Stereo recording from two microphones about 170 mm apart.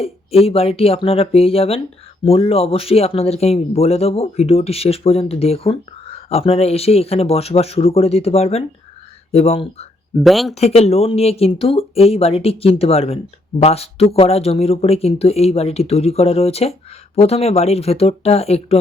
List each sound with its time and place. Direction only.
0.0 s speech: 35° left (ahead or behind)
10.2 s speech: centre (ahead or behind)
10.5 s speech: 40° left (ahead or behind)